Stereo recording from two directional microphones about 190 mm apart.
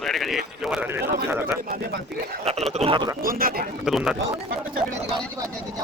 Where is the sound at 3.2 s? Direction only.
50° right (ahead or behind).